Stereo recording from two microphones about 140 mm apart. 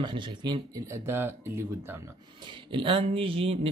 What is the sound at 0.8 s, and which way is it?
Speech, 20° right (ahead or behind).